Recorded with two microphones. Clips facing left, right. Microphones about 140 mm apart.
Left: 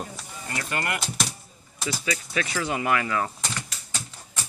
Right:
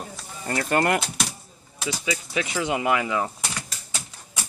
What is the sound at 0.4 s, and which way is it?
Speech, 45° right (ahead or behind).